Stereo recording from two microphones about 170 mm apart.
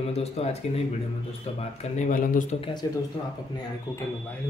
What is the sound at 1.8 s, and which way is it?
Speech, 50° left (ahead or behind).